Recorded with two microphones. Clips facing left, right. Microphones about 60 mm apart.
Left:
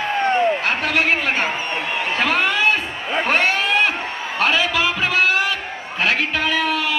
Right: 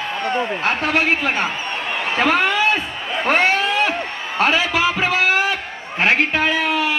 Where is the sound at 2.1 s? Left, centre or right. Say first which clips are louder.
Right 3 dB; right.